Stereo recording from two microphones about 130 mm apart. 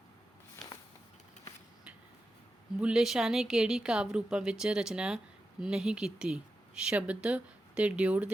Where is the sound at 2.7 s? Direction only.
5° right (ahead or behind).